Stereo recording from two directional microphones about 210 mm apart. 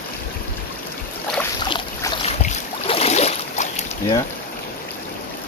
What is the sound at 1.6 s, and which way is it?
Boat, 20° left (ahead or behind).